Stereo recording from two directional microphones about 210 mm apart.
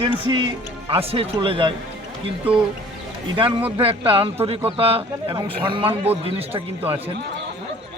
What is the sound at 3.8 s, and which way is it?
Speech, 25° right (ahead or behind).